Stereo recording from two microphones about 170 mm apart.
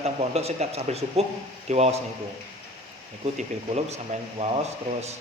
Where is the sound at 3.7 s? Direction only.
40° right (ahead or behind).